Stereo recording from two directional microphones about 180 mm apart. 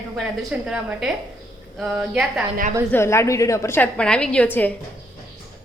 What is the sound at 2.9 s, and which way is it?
A woman's voice, 15° left (ahead or behind).